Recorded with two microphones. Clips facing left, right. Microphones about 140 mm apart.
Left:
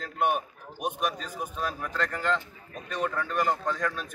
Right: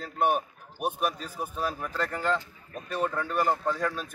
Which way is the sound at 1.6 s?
10° right (ahead or behind).